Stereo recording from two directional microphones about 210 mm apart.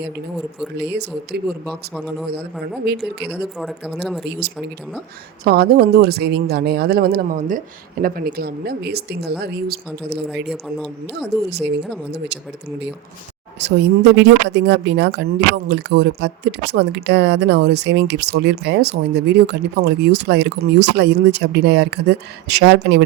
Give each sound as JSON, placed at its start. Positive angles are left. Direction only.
{"t": 0.8, "sound": "speech", "side_deg": -55}
{"t": 2.8, "sound": "speech", "side_deg": -50}
{"t": 3.2, "sound": "speech", "side_deg": -5}
{"t": 4.3, "sound": "speech", "side_deg": -50}
{"t": 10.5, "sound": "speech", "side_deg": 5}
{"t": 13.6, "sound": "speech", "side_deg": -55}